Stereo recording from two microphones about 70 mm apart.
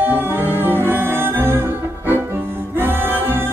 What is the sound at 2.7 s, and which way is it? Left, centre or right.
Music, right.